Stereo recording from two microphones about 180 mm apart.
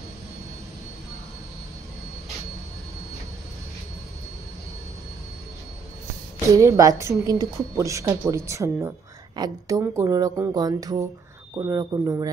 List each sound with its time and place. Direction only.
6.5 s a woman's voice: 15° right (ahead or behind)